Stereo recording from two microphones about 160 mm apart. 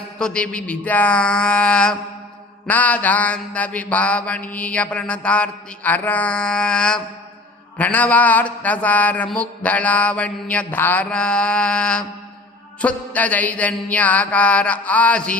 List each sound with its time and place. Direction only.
0.2 s mantra: 5° left (ahead or behind)